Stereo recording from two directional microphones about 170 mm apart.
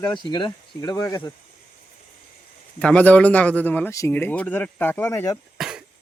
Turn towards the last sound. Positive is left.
turn(degrees=-5)  # may be behind; listen again after turning